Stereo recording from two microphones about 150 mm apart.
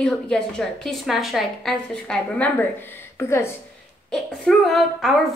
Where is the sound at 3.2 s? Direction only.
15° left (ahead or behind).